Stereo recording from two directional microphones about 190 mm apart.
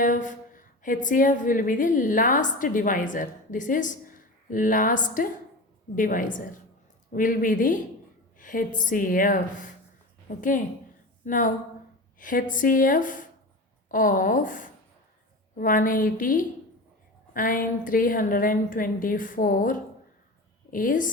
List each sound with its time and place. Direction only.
0.0 s a woman's voice: 40° left (ahead or behind)